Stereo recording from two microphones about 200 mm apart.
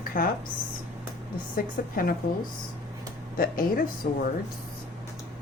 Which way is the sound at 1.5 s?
45° left (ahead or behind).